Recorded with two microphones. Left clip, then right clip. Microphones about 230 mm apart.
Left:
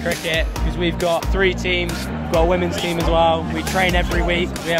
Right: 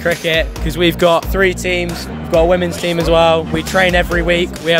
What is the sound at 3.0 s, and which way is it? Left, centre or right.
Speech, right.